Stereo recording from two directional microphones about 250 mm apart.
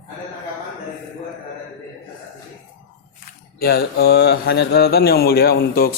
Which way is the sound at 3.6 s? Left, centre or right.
Left.